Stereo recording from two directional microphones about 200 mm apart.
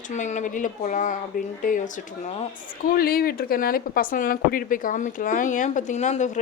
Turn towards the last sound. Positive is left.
turn(degrees=35)  # may be behind; listen again after turning